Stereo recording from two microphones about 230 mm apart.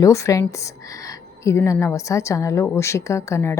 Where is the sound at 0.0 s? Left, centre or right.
Centre.